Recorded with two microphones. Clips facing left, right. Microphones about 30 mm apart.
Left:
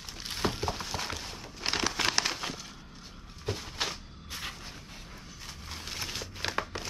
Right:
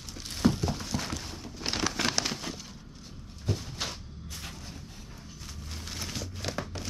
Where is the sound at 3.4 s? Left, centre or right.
Left.